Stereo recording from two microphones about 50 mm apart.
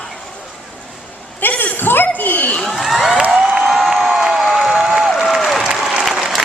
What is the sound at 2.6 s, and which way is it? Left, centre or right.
Crowd, centre.